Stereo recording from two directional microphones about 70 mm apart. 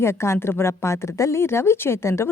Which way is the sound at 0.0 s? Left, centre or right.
Left.